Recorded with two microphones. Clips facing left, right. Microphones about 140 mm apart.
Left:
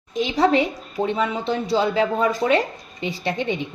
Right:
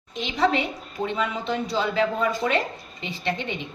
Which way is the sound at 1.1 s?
35° left (ahead or behind).